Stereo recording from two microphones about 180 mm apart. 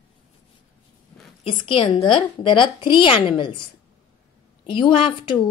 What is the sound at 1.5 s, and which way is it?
A woman's voice, 30° left (ahead or behind).